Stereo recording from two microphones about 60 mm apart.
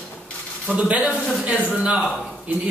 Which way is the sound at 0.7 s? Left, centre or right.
Centre.